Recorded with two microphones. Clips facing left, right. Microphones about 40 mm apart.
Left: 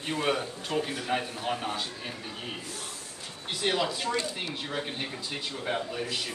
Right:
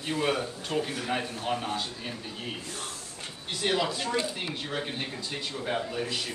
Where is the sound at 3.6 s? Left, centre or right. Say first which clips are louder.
Even; centre.